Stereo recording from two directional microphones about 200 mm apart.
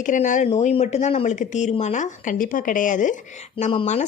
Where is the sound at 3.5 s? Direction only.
25° left (ahead or behind).